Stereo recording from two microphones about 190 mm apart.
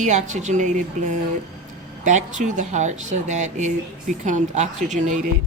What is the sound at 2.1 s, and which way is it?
Speech, 40° right (ahead or behind).